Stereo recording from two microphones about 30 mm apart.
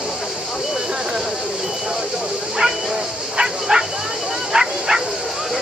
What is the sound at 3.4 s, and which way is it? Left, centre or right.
Bow-wow, right.